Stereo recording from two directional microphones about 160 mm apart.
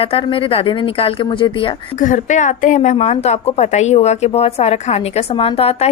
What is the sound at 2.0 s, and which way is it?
A woman's voice, 55° left (ahead or behind).